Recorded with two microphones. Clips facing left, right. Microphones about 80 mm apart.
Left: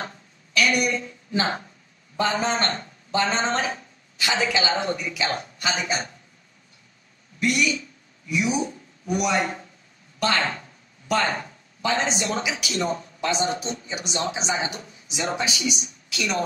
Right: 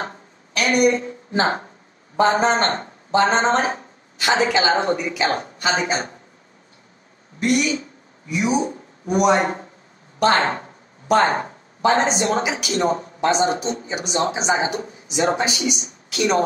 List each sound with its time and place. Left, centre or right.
0.0 s a sound: right
2.1 s speech: right
7.3 s speech: right